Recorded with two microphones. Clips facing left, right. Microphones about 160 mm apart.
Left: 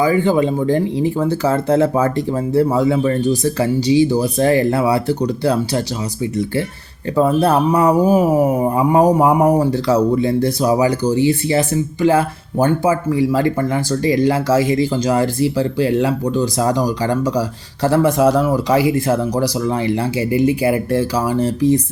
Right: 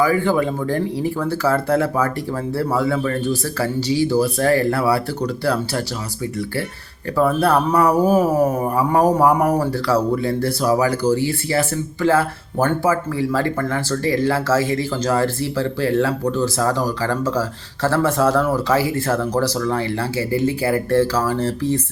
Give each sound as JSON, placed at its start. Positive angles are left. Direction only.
{"t": 0.0, "sound": "speech", "side_deg": 20}
{"t": 7.2, "sound": "speech", "side_deg": 20}